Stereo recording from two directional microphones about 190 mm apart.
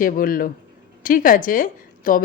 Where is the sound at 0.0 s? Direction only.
50° left (ahead or behind).